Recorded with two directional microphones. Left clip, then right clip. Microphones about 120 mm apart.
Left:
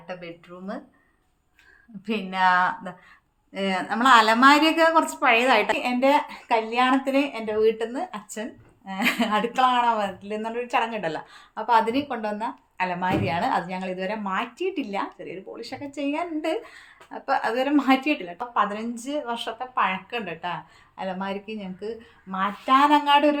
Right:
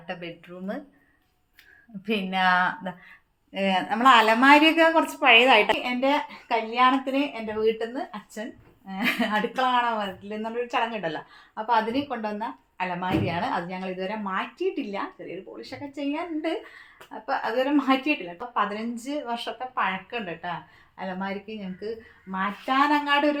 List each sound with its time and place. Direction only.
0.1 s speech: 25° right (ahead or behind)
2.0 s a woman's voice: 15° right (ahead or behind)
5.8 s speech: 25° left (ahead or behind)
18.5 s speech: 15° left (ahead or behind)